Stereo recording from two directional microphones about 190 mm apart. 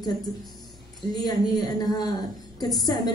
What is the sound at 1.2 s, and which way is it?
Speech, 20° left (ahead or behind).